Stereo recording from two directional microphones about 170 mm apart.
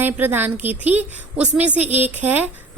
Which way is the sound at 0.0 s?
10° right (ahead or behind).